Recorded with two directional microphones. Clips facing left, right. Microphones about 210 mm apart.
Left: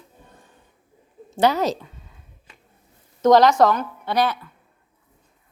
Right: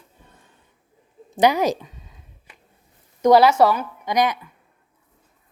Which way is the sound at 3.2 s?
10° right (ahead or behind).